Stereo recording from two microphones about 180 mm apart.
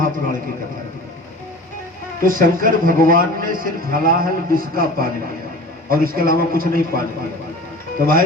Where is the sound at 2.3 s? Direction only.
50° right (ahead or behind).